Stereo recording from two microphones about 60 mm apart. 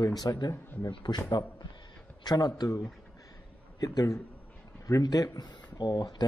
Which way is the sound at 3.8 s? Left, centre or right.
Left.